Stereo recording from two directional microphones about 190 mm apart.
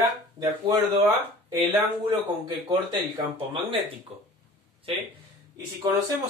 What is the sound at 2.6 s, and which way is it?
Speech, 25° right (ahead or behind).